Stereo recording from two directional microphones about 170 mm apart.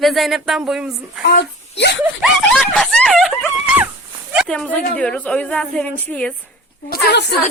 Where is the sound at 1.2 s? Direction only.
85° left.